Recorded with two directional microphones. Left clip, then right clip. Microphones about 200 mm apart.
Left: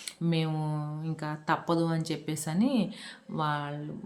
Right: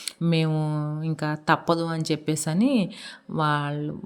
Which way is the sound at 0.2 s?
35° right (ahead or behind).